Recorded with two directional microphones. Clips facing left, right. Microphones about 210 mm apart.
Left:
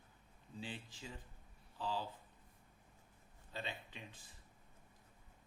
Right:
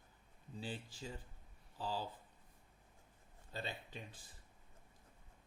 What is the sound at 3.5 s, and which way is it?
Speech, 40° right (ahead or behind).